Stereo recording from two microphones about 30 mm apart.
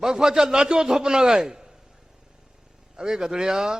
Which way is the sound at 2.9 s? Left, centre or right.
Right.